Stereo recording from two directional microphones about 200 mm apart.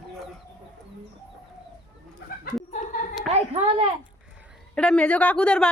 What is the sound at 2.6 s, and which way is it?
Chuckle, 40° left (ahead or behind).